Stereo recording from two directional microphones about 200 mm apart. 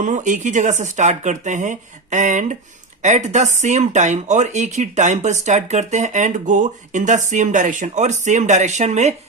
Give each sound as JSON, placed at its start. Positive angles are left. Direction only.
{"t": 0.0, "sound": "speech", "side_deg": -40}